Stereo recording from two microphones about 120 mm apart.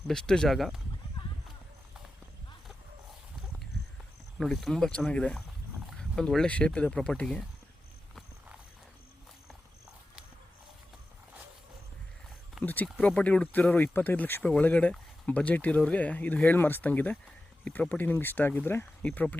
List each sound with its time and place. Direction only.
0.1 s speech: 5° left (ahead or behind)
1.2 s clip-clop: 40° left (ahead or behind)
4.4 s speech: centre (ahead or behind)
12.6 s speech: 15° left (ahead or behind)